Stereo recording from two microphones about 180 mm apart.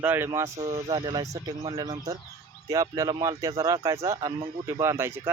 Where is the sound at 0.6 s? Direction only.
30° right (ahead or behind); by 5.3 s 10° right (ahead or behind).